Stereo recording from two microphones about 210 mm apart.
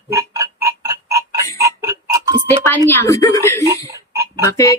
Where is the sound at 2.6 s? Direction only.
10° left (ahead or behind).